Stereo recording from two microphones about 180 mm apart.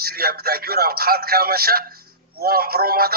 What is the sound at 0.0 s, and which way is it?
Speech, 60° right (ahead or behind).